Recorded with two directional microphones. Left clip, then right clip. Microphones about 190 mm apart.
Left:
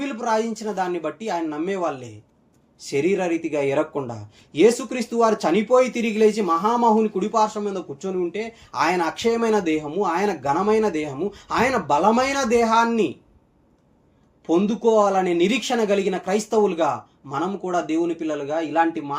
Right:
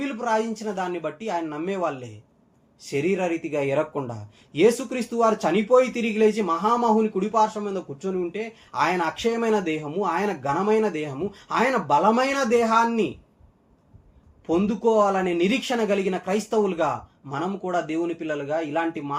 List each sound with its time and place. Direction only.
0.0 s speech: 25° left (ahead or behind)
14.4 s speech: 25° left (ahead or behind)